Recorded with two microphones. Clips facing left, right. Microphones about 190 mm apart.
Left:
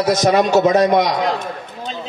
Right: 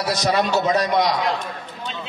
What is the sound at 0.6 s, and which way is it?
Speech, 50° left (ahead or behind).